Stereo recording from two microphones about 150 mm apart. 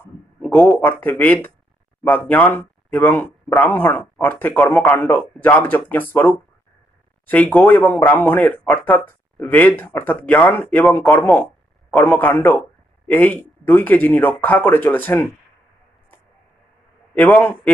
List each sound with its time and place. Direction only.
0.5 s speech: 10° left (ahead or behind)
17.1 s a man's voice: 10° left (ahead or behind)